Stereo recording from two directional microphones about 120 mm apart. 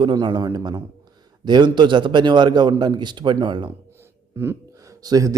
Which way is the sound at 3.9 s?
20° right (ahead or behind).